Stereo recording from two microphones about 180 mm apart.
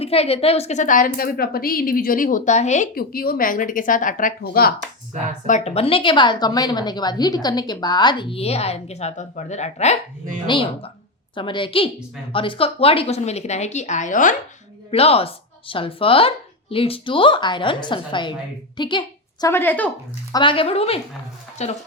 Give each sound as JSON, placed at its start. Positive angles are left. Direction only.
{"t": 0.0, "sound": "a woman's voice", "side_deg": 35}
{"t": 2.9, "sound": "a woman's voice", "side_deg": 55}
{"t": 5.5, "sound": "a woman's voice", "side_deg": 40}
{"t": 10.4, "sound": "a woman's voice", "side_deg": 25}
{"t": 14.8, "sound": "a woman's voice", "side_deg": 35}
{"t": 19.5, "sound": "speech", "side_deg": 10}
{"t": 20.3, "sound": "a woman's voice", "side_deg": 30}